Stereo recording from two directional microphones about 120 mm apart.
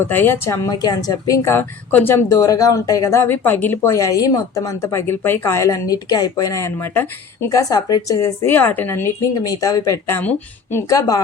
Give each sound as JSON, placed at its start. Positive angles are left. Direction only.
{"t": 0.1, "sound": "speech", "side_deg": 20}
{"t": 7.5, "sound": "speech", "side_deg": 30}
{"t": 8.4, "sound": "speech", "side_deg": 15}